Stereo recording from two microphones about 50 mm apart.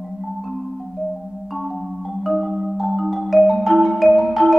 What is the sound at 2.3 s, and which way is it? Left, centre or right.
Marimba, centre.